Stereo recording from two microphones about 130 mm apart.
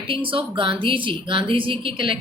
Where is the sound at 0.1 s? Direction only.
40° right (ahead or behind).